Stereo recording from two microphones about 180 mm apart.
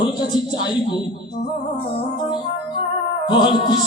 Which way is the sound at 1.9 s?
25° left (ahead or behind).